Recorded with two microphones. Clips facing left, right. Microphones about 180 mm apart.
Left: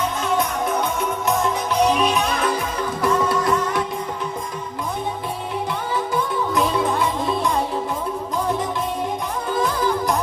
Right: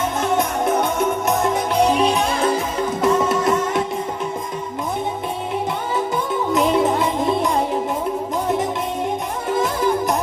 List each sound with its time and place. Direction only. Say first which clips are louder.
0.6 s music: right 4 dB; 45° right (ahead or behind)
1.8 s music: right 1 dB; 30° right (ahead or behind)
6.5 s music: right 5 dB; 25° right (ahead or behind)
9.5 s music: right 2 dB; 25° right (ahead or behind)